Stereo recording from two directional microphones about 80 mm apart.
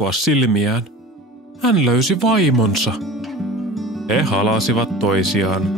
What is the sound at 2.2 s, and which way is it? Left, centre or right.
Speech, centre.